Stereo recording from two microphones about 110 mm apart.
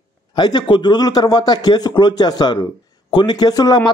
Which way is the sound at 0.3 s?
40° left (ahead or behind).